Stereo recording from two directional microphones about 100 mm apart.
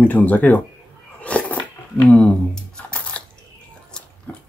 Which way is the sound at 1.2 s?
15° left (ahead or behind).